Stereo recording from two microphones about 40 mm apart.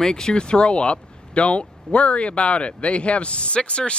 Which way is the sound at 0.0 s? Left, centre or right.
Centre.